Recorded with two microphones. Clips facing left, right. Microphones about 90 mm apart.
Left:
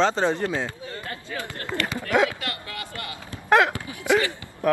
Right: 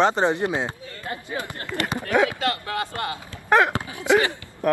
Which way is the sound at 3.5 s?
20° right (ahead or behind).